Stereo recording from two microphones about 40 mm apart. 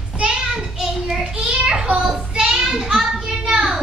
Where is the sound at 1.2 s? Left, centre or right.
Right.